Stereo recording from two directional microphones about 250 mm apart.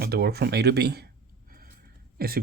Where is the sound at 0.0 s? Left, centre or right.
Right.